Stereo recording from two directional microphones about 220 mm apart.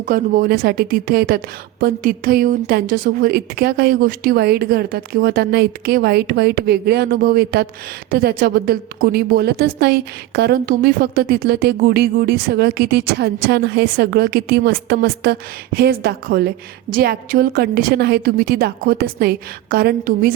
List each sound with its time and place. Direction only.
0.0 s a woman's voice: 40° right (ahead or behind)